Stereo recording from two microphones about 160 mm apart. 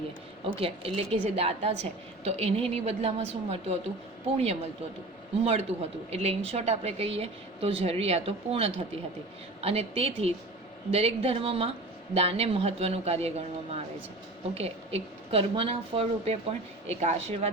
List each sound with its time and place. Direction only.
0.4 s a woman's voice: 35° right (ahead or behind)
5.4 s a woman's voice: 40° right (ahead or behind)